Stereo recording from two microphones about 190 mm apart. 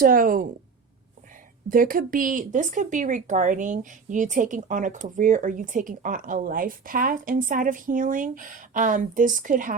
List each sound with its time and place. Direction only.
0.0 s speech: 45° right (ahead or behind)
1.7 s speech: 45° right (ahead or behind)